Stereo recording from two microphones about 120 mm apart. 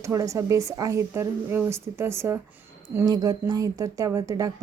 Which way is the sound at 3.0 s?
30° right (ahead or behind).